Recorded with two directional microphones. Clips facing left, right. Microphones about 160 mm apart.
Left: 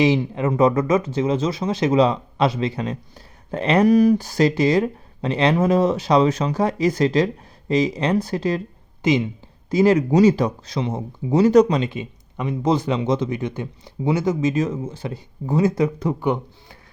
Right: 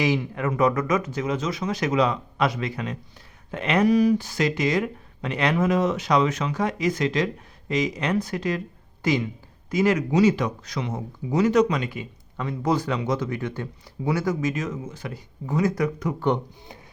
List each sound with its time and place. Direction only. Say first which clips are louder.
0.0 s speech: left 5 dB; 25° left (ahead or behind)
3.8 s speech: left 3 dB; 45° left (ahead or behind); by 16.1 s 25° left (ahead or behind)